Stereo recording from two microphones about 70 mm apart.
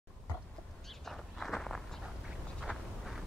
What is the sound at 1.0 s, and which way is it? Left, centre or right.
Walk, centre.